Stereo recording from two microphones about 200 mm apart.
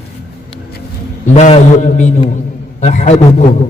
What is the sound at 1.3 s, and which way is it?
A man's voice, 35° left (ahead or behind).